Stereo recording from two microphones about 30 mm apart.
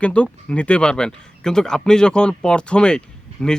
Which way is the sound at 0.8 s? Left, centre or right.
Left.